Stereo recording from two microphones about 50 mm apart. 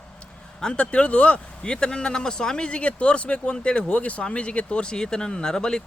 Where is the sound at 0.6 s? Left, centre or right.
Left.